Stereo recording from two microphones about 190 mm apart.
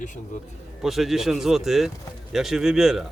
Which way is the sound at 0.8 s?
Centre (ahead or behind).